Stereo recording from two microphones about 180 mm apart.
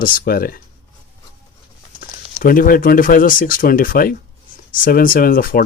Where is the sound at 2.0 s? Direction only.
50° left (ahead or behind).